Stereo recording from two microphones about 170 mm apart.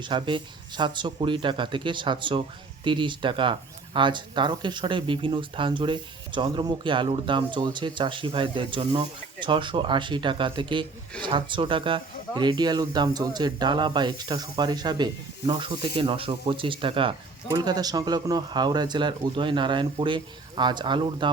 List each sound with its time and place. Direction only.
0.0 s speech: 30° right (ahead or behind)